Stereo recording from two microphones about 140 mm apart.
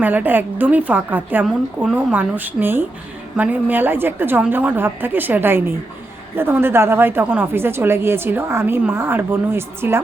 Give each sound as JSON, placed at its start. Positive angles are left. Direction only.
{"t": 0.0, "sound": "a woman's voice", "side_deg": -10}